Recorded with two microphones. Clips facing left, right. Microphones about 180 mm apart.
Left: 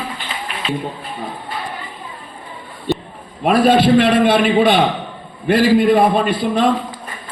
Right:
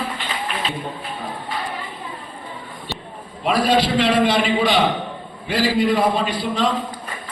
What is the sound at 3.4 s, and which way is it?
A man's voice, 55° left (ahead or behind).